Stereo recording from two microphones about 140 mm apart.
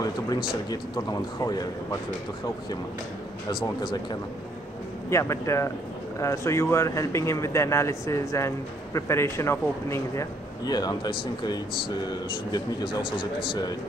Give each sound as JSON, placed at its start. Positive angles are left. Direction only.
{"t": 0.0, "sound": "speech", "side_deg": 25}
{"t": 3.4, "sound": "speech", "side_deg": 30}